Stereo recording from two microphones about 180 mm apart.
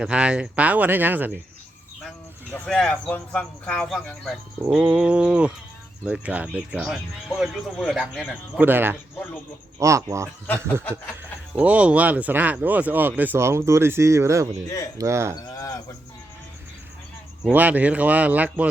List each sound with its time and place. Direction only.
0.0 s speech: 5° right (ahead or behind)
2.5 s speech: 5° left (ahead or behind); by 15.4 s 15° right (ahead or behind)
15.5 s speech: 20° left (ahead or behind)
17.4 s speech: 10° right (ahead or behind)